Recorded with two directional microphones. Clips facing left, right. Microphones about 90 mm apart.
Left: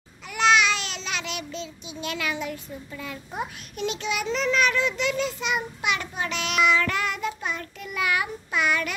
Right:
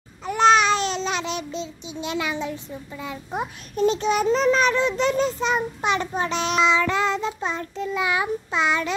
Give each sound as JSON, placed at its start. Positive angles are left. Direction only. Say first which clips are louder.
{"t": 0.3, "sound": "child singing", "louder": "right 4 dB", "side_deg": -35}
{"t": 3.7, "sound": "a child's voice", "louder": "right 8 dB", "side_deg": -35}